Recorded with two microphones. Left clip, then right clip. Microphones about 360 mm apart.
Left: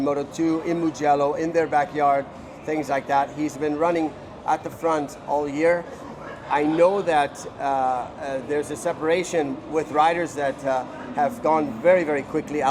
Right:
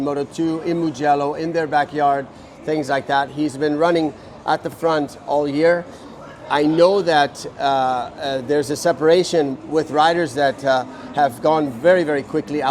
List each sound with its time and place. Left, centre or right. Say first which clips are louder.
0.0 s a man's voice: right 2 dB; centre; by 8.9 s right
8.9 s speech: right 8 dB; right
9.4 s a man's voice: right 5 dB; right